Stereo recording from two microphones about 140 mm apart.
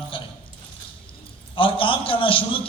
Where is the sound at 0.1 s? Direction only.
40° left (ahead or behind).